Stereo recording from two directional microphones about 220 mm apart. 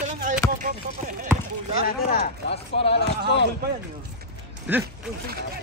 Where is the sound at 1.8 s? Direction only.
40° left (ahead or behind).